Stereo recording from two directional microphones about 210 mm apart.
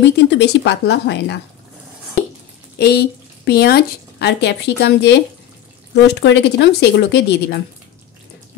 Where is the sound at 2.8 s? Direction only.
50° left (ahead or behind).